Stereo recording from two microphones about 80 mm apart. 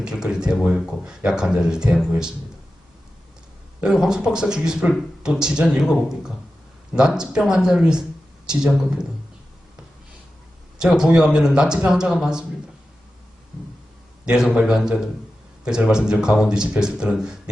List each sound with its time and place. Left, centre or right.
0.0 s speech: centre
3.8 s speech: centre
10.9 s speech: centre
14.3 s speech: centre